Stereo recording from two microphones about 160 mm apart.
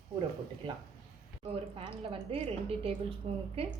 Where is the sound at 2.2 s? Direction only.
40° right (ahead or behind).